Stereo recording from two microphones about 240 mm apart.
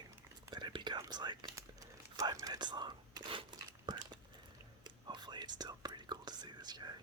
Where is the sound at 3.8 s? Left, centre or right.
Centre.